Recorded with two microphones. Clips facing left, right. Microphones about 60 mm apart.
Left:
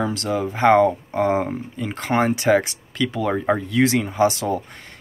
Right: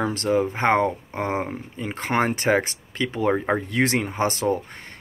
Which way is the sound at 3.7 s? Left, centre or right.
Right.